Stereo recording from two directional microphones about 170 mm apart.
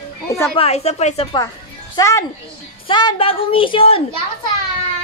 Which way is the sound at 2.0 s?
15° left (ahead or behind).